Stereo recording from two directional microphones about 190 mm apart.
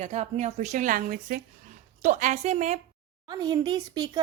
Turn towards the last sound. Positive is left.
turn(degrees=-20)  # may be behind; listen again after turning